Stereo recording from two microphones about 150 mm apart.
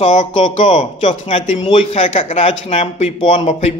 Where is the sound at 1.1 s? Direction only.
35° left (ahead or behind).